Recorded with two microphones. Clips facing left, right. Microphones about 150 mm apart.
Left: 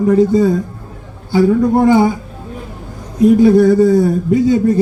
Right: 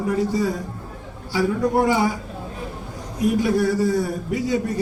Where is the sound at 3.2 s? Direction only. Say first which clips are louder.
Left 11 dB; 25° left (ahead or behind).